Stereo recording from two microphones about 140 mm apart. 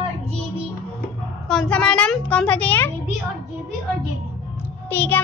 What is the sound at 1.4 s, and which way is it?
A woman's voice, 5° left (ahead or behind).